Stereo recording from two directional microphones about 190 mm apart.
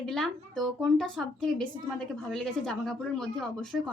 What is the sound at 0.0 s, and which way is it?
Speech, centre (ahead or behind).